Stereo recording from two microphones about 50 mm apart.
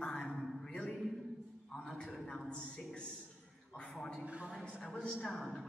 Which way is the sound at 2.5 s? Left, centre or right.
Centre.